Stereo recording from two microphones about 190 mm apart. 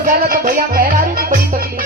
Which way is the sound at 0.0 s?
50° right (ahead or behind).